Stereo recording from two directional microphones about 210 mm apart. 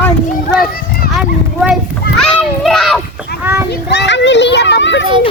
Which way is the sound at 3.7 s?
50° left (ahead or behind).